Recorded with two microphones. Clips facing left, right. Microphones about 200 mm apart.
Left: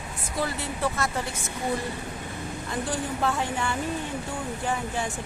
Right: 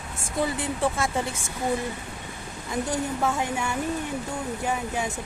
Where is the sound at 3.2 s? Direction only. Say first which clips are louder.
Right 1 dB; 10° right (ahead or behind).